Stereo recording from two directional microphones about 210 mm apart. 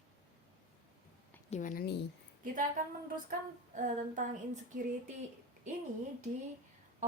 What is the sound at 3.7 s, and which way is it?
Speech, 35° right (ahead or behind).